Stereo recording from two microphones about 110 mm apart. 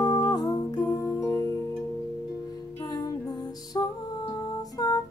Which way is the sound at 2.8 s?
35° left (ahead or behind).